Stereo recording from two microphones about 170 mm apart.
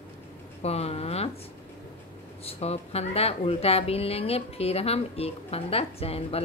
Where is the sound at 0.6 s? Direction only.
40° left (ahead or behind).